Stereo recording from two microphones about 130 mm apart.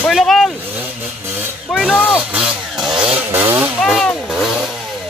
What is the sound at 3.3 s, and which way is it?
Speech, 15° right (ahead or behind).